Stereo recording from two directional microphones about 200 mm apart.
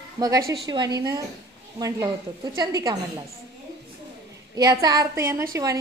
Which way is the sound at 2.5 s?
20° right (ahead or behind).